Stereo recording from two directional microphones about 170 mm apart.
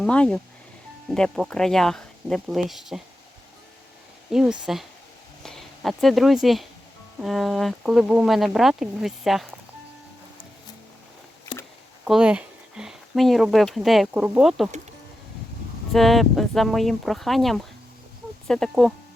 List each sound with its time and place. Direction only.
0.0 s speech: 5° left (ahead or behind)
4.3 s speech: 5° right (ahead or behind)
11.5 s a sound: 30° left (ahead or behind)
12.0 s speech: 5° right (ahead or behind)
15.9 s speech: centre (ahead or behind)